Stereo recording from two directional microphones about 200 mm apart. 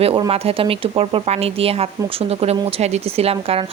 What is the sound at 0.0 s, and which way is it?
Speech, 30° right (ahead or behind).